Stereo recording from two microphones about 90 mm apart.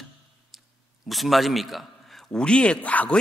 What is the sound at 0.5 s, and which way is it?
Dog, 5° right (ahead or behind).